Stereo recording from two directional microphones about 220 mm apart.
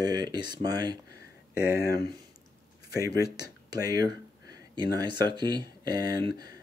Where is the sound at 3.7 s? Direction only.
15° right (ahead or behind).